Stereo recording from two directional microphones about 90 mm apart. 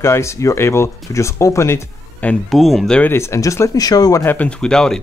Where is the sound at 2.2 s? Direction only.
20° left (ahead or behind).